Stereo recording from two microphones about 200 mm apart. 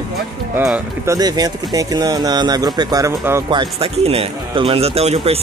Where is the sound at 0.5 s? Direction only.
10° right (ahead or behind); by 5.3 s 30° right (ahead or behind).